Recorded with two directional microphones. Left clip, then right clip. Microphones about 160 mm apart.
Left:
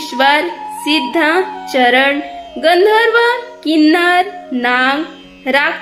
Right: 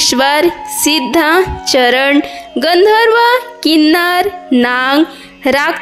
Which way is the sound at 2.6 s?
40° right (ahead or behind).